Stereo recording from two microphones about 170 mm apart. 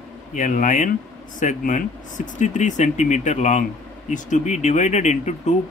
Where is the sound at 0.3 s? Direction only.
50° left (ahead or behind).